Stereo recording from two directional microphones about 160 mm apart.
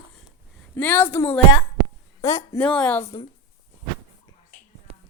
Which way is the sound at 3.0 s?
40° left (ahead or behind).